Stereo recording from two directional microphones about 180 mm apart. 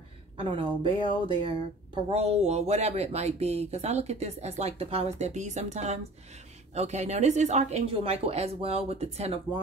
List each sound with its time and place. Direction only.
0.4 s speech: 30° right (ahead or behind)